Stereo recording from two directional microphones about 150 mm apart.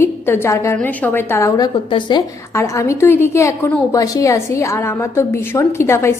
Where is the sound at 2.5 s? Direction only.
20° left (ahead or behind).